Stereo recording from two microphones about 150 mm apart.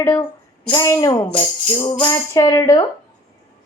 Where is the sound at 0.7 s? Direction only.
25° left (ahead or behind).